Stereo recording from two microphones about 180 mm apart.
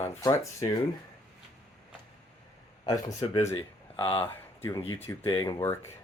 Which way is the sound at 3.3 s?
30° left (ahead or behind).